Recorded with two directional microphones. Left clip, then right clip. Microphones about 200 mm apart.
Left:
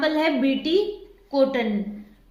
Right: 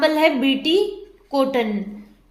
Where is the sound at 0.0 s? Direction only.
40° right (ahead or behind).